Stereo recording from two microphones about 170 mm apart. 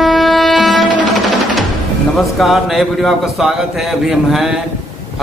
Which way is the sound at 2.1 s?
Centre (ahead or behind).